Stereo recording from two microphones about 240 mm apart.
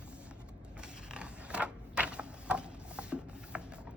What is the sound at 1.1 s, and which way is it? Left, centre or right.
Mechanisms, centre.